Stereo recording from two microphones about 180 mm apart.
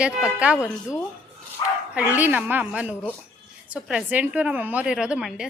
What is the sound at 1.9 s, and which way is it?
A woman's voice, 10° right (ahead or behind).